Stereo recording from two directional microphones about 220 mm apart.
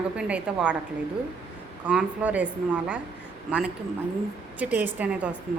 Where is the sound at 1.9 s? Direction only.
5° right (ahead or behind).